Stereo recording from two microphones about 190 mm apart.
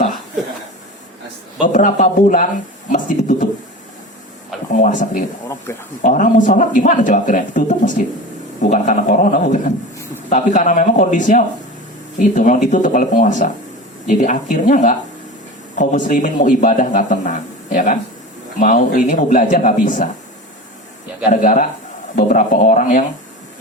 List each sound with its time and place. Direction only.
1.6 s a man's voice: 40° left (ahead or behind)
4.8 s a man's voice: 45° left (ahead or behind)
21.4 s a man's voice: 40° left (ahead or behind)